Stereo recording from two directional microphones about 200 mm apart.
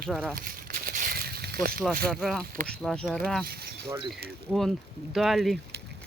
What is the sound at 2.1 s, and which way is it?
Speech, centre (ahead or behind).